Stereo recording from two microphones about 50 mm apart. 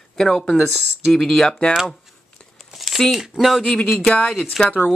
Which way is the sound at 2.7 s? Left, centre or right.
Centre.